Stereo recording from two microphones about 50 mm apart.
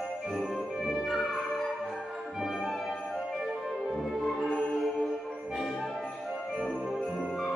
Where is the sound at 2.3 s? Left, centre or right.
Centre.